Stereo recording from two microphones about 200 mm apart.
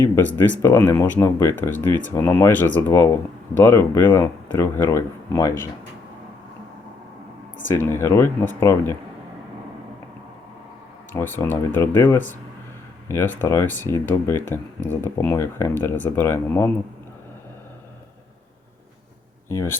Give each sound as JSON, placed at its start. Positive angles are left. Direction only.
{"t": 0.0, "sound": "speech", "side_deg": 10}
{"t": 7.7, "sound": "speech", "side_deg": 10}
{"t": 11.1, "sound": "speech", "side_deg": 10}
{"t": 19.5, "sound": "speech", "side_deg": 15}